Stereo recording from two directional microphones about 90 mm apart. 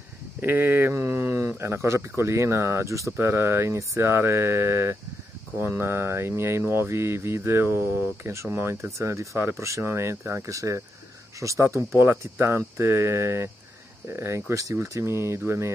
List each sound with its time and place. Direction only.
0.4 s speech: 20° right (ahead or behind)
0.9 s mantra: 30° right (ahead or behind)
1.6 s speech: 30° right (ahead or behind)